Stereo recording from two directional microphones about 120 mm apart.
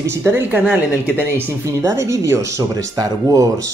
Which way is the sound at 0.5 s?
10° right (ahead or behind).